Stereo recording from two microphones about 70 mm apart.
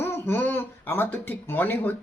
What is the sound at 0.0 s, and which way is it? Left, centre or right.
Speech, left.